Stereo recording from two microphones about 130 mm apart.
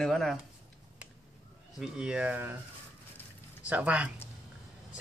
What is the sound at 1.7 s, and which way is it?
Speech, 5° right (ahead or behind).